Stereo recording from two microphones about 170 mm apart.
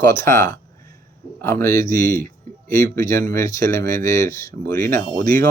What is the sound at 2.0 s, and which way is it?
Speech, 55° right (ahead or behind).